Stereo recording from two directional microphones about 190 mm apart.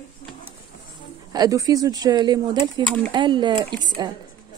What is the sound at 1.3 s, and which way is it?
Speech, 20° right (ahead or behind).